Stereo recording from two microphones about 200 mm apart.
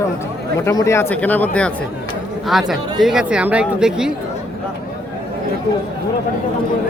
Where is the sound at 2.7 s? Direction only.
Centre (ahead or behind).